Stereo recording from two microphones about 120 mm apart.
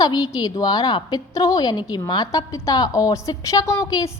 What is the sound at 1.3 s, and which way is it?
A woman's voice, 30° left (ahead or behind).